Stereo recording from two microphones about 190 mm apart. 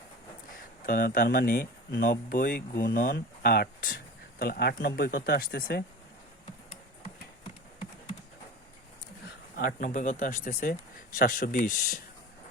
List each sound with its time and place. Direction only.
0.5 s speech: 50° left (ahead or behind)
9.2 s speech: 50° left (ahead or behind)